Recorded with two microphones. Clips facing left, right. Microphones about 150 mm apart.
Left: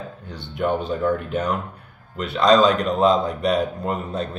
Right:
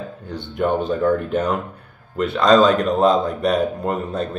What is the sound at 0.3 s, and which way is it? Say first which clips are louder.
A man's voice: right 2 dB; 50° right (ahead or behind).